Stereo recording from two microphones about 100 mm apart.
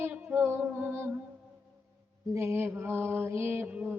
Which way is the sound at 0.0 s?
15° right (ahead or behind).